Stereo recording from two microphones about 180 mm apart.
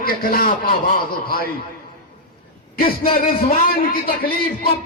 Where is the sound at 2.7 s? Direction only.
55° left (ahead or behind).